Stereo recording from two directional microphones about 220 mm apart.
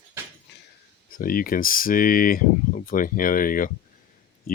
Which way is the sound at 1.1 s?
40° left (ahead or behind).